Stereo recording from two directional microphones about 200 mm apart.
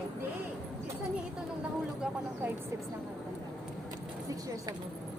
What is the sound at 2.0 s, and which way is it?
Speech, 10° right (ahead or behind).